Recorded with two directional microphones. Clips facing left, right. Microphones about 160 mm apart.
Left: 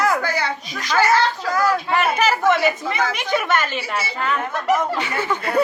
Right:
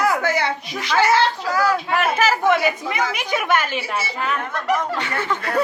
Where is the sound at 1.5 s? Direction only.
5° right (ahead or behind).